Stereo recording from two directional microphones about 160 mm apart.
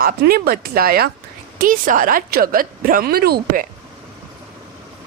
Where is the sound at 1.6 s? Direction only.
55° right (ahead or behind).